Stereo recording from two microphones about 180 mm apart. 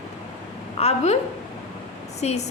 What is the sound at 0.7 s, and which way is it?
Speech, 35° left (ahead or behind).